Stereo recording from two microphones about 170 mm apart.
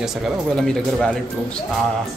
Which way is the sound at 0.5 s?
5° left (ahead or behind).